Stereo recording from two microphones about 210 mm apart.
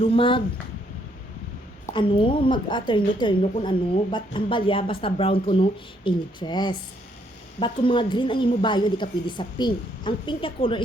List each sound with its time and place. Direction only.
0.0 s a woman's voice: 25° left (ahead or behind)
1.9 s a woman's voice: 25° left (ahead or behind)